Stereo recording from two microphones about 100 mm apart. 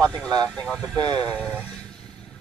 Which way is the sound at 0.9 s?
45° right (ahead or behind).